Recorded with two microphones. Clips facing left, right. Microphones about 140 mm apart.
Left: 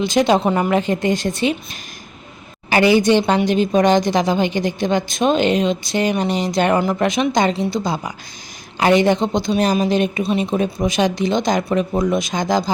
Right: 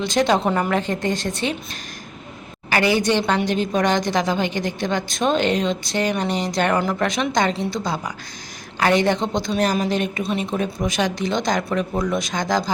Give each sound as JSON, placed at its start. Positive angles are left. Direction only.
{"t": 0.0, "sound": "a woman's voice", "side_deg": 10}
{"t": 2.6, "sound": "a woman's voice", "side_deg": 20}